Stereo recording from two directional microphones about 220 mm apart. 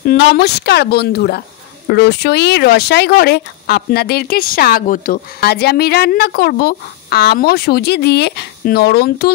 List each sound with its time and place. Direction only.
0.0 s speech: 45° left (ahead or behind)